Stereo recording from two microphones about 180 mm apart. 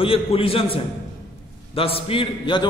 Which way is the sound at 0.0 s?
30° left (ahead or behind).